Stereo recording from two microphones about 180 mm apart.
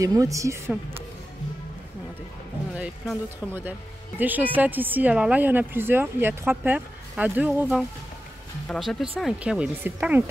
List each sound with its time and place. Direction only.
0.0 s speech: 20° right (ahead or behind)
2.7 s speech: 5° right (ahead or behind)